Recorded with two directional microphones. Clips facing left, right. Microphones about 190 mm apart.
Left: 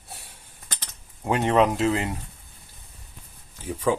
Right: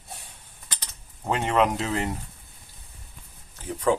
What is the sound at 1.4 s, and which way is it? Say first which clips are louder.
Speech: left 3 dB; 15° left (ahead or behind).